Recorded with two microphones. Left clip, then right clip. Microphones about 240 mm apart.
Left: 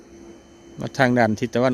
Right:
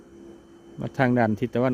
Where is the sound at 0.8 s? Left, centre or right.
Centre.